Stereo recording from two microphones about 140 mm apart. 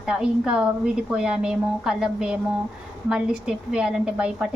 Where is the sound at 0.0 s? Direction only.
5° right (ahead or behind).